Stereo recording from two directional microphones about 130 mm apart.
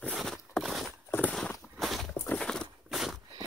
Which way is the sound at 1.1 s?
10° left (ahead or behind).